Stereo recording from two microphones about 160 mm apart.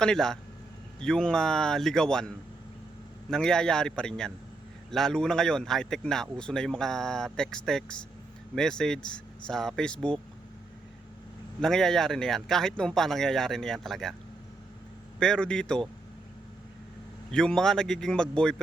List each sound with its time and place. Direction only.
0.0 s speech: 5° left (ahead or behind)
11.6 s speech: 5° left (ahead or behind)
15.2 s speech: 5° left (ahead or behind)
17.3 s speech: 5° left (ahead or behind)